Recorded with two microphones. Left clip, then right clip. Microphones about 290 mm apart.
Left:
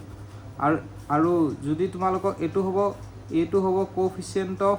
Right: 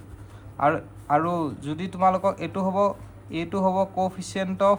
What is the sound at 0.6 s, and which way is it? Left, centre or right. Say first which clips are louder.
Speech: right 2 dB; right.